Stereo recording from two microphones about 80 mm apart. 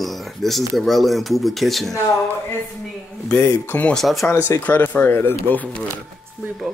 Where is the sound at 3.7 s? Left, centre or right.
Left.